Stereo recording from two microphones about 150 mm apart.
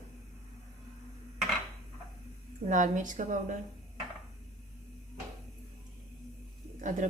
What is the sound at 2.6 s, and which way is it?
Speech, 55° right (ahead or behind).